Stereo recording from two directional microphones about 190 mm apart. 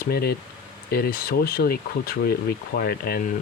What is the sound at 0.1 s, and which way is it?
Speech, 55° left (ahead or behind).